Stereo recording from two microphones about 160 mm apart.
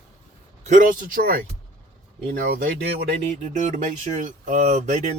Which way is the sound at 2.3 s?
75° right (ahead or behind).